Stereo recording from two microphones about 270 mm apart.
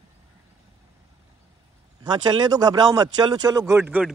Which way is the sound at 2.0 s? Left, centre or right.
Centre.